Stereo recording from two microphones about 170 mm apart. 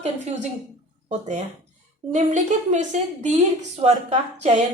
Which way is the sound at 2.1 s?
45° right (ahead or behind).